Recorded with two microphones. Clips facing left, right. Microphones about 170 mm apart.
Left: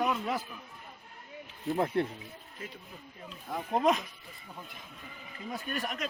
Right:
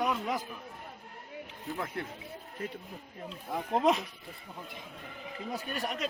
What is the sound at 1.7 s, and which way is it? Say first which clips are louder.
Speech: left 8 dB; 35° left (ahead or behind).